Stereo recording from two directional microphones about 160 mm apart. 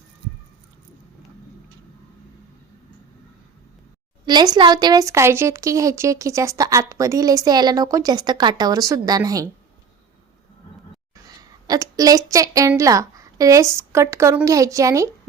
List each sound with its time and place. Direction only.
4.3 s a woman's voice: 25° right (ahead or behind)
11.7 s a woman's voice: 20° right (ahead or behind)